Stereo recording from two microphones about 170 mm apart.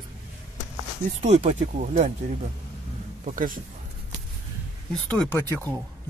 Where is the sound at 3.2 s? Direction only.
55° right (ahead or behind).